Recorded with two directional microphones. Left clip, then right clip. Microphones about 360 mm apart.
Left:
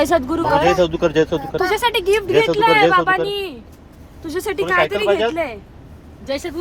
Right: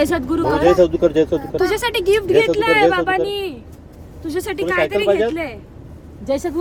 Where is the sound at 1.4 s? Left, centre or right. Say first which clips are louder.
Left 1 dB; centre.